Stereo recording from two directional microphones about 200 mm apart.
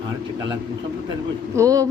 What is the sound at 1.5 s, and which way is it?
Speech, 15° right (ahead or behind).